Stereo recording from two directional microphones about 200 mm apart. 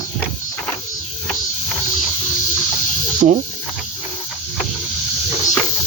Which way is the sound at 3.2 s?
40° right (ahead or behind).